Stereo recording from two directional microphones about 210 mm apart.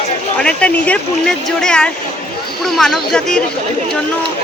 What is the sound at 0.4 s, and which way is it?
Speech, 5° left (ahead or behind).